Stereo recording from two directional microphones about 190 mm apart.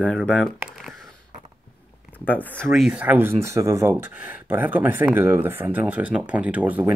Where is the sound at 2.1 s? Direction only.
10° left (ahead or behind).